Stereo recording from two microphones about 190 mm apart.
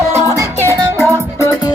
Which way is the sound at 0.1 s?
15° right (ahead or behind).